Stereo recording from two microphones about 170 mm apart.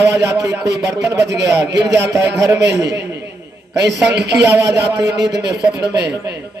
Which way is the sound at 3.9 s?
80° right.